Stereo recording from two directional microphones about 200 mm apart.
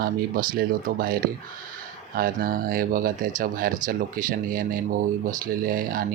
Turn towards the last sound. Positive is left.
turn(degrees=-45)  # may be behind; listen again after turning